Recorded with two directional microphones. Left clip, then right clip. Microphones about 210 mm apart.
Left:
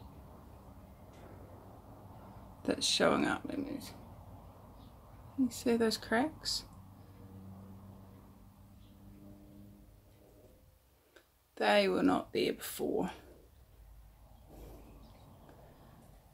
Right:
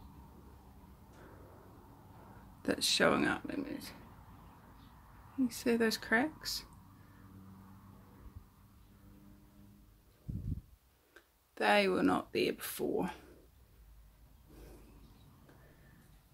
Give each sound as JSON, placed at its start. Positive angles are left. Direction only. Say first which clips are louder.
{"t": 2.6, "sound": "speech", "louder": "even", "side_deg": -20}
{"t": 5.5, "sound": "speech", "louder": "even", "side_deg": -20}
{"t": 11.1, "sound": "speech", "louder": "left 1 dB", "side_deg": -20}